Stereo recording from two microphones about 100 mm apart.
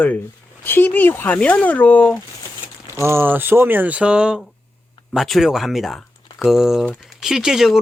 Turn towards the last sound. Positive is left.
turn(degrees=-5)  # may be behind; listen again after turning